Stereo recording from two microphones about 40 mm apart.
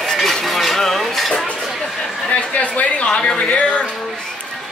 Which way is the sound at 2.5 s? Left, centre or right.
Left.